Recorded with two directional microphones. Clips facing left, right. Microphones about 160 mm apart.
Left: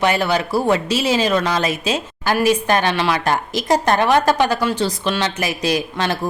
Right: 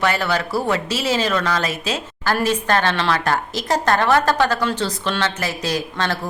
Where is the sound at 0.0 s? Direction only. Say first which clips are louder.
Left 3 dB; 15° left (ahead or behind).